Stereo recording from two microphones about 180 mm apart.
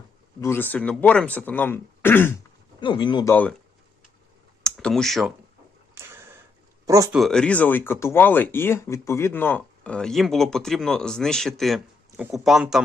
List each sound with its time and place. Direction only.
0.4 s speech: 10° left (ahead or behind)
2.8 s speech: 25° left (ahead or behind)
4.6 s speech: 5° left (ahead or behind)
5.9 s a sound: 15° right (ahead or behind)
6.8 s speech: 15° right (ahead or behind)
7.1 s speech: centre (ahead or behind)